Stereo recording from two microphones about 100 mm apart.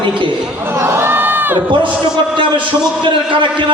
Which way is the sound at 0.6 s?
25° right (ahead or behind).